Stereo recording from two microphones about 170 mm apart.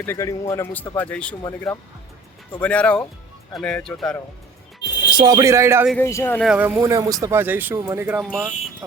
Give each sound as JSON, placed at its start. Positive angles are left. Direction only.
{"t": 0.0, "sound": "a man's voice", "side_deg": 15}
{"t": 2.6, "sound": "a man's voice", "side_deg": 10}
{"t": 5.1, "sound": "speech", "side_deg": -25}
{"t": 6.0, "sound": "a man's voice", "side_deg": 15}
{"t": 6.4, "sound": "speech", "side_deg": -5}